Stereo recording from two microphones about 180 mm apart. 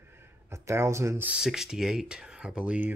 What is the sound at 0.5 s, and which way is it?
Speech, 15° right (ahead or behind).